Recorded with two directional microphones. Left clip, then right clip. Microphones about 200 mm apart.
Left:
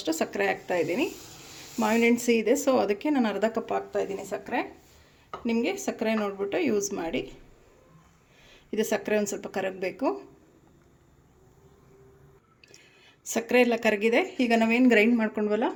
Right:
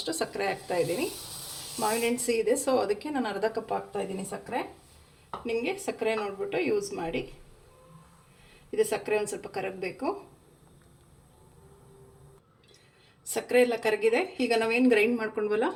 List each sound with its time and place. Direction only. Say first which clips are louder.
0.0 s speech: left 3 dB; 45° left (ahead or behind)
8.7 s speech: left 1 dB; 50° left (ahead or behind)
13.3 s speech: left 1 dB; 45° left (ahead or behind)